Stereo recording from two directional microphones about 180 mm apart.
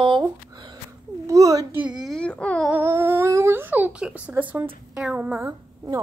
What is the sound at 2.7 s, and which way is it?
A woman's voice, 10° right (ahead or behind).